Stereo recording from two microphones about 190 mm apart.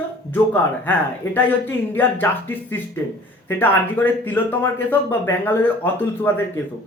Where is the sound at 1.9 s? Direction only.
10° left (ahead or behind).